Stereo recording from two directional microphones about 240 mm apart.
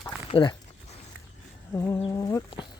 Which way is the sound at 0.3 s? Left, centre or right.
Left.